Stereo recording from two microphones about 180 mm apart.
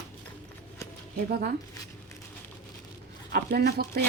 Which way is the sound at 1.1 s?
60° right (ahead or behind).